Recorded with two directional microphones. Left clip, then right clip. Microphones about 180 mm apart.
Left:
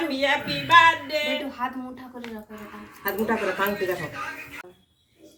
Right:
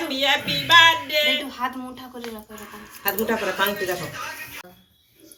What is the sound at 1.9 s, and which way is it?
A woman's voice, 20° left (ahead or behind).